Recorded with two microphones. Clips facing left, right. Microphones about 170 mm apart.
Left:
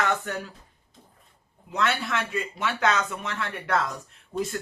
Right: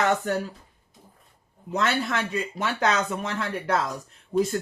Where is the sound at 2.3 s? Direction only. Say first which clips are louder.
Right 1 dB; 35° right (ahead or behind).